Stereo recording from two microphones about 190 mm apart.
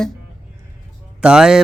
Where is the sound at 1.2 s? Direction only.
5° right (ahead or behind).